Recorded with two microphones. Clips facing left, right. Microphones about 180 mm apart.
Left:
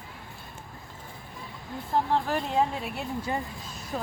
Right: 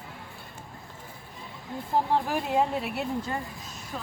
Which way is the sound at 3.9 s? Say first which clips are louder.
Left 5 dB; 40° left (ahead or behind).